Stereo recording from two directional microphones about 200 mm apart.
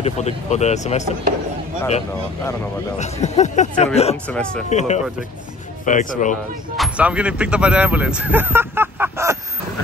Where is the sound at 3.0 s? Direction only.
35° left (ahead or behind).